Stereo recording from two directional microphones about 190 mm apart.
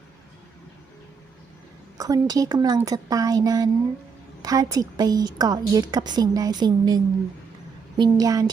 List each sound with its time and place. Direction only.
2.0 s a woman's voice: 20° right (ahead or behind)